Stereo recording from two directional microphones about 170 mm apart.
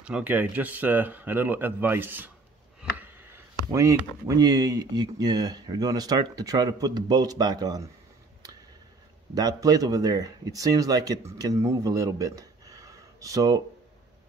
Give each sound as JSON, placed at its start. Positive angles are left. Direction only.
{"t": 0.0, "sound": "speech", "side_deg": -10}
{"t": 2.8, "sound": "a sound", "side_deg": -10}
{"t": 3.7, "sound": "speech", "side_deg": -20}
{"t": 9.3, "sound": "speech", "side_deg": -20}